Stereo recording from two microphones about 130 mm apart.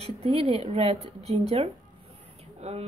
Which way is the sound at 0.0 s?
50° right (ahead or behind).